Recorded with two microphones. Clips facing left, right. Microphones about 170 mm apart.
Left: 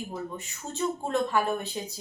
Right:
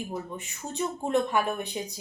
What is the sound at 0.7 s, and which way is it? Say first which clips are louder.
Speech: right 1 dB; 15° right (ahead or behind).